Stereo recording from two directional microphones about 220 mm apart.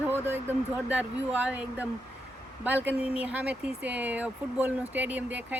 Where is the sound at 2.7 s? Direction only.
5° right (ahead or behind).